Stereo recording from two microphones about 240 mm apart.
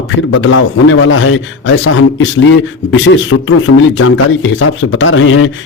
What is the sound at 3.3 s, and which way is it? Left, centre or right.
Speech, left.